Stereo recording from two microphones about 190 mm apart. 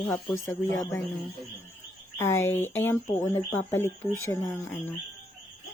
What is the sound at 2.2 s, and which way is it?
A woman's voice, 15° left (ahead or behind).